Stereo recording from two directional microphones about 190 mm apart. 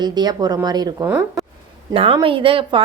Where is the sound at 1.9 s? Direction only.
30° right (ahead or behind).